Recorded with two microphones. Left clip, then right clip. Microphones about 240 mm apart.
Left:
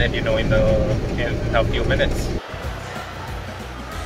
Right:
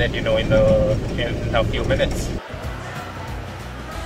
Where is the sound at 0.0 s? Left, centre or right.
Right.